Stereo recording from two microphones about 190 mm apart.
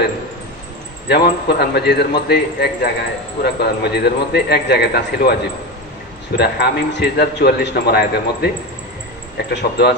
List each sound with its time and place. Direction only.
1.0 s speech: 60° left (ahead or behind)